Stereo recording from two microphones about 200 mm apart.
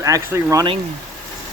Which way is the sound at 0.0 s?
15° right (ahead or behind).